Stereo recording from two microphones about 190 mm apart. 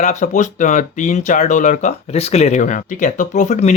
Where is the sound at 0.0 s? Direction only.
40° left (ahead or behind).